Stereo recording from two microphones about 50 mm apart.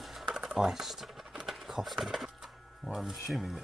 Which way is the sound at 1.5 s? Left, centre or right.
Centre.